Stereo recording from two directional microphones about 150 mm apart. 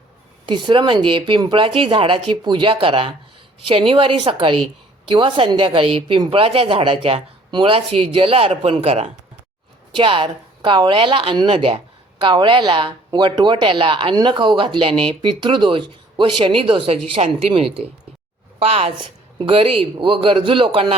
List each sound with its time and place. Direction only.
0.4 s a woman's voice: 30° right (ahead or behind)